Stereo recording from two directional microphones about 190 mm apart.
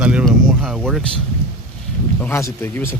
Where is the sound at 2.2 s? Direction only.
10° left (ahead or behind).